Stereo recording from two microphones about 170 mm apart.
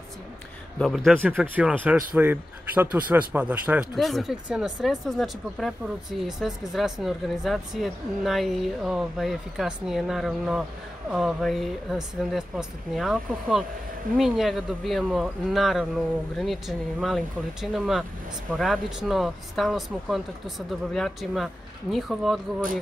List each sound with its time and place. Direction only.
0.7 s speech: centre (ahead or behind)
1.3 s speech: 10° right (ahead or behind)